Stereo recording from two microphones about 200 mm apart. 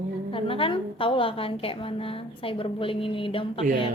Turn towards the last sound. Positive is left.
turn(degrees=25)  # may be behind; listen again after turning